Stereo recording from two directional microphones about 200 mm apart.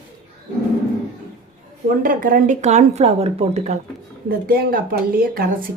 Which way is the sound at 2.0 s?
45° right (ahead or behind).